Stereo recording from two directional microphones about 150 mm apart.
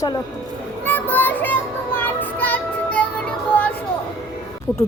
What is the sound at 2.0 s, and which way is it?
Music, 10° left (ahead or behind).